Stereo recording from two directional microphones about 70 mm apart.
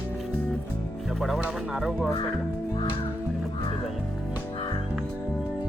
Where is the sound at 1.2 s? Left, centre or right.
Centre.